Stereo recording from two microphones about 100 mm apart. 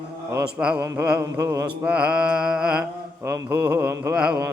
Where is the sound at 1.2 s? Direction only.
35° right (ahead or behind).